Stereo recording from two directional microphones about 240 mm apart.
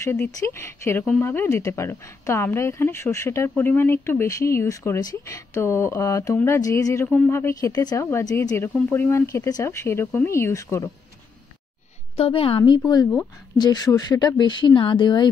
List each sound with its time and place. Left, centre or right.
0.0 s a woman's voice: centre
12.2 s a woman's voice: left